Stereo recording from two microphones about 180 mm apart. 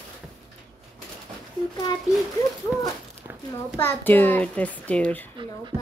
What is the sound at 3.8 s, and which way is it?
A child's voice, 10° left (ahead or behind).